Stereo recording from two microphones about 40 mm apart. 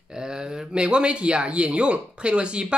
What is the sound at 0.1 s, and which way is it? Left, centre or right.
Speech, centre.